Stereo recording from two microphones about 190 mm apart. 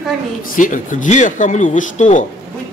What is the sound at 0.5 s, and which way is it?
A man's voice, 40° left (ahead or behind).